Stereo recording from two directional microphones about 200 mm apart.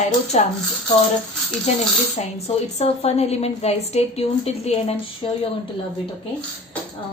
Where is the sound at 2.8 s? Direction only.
30° left (ahead or behind).